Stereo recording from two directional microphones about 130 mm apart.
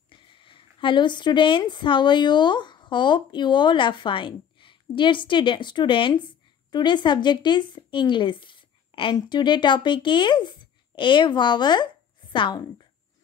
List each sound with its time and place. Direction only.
0.1 s a woman's voice: 40° left (ahead or behind)